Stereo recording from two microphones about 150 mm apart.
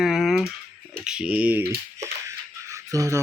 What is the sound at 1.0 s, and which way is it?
Speech, 5° right (ahead or behind).